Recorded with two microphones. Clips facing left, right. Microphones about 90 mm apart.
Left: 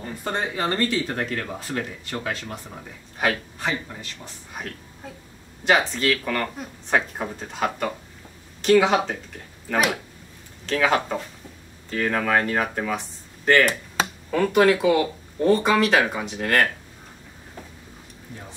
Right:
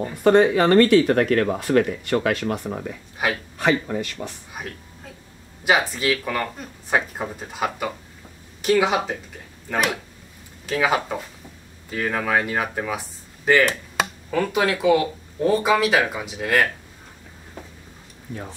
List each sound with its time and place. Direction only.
0.2 s speech: 75° right (ahead or behind)
3.2 s speech: 5° right (ahead or behind)
3.5 s speech: 70° right (ahead or behind)
5.6 s speech: 5° right (ahead or behind)
10.7 s speech: 5° right (ahead or behind)